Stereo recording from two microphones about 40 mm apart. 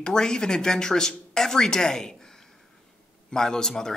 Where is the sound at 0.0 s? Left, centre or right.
Centre.